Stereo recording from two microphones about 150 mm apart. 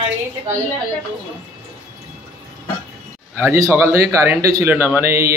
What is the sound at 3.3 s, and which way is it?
A man's voice, 15° right (ahead or behind).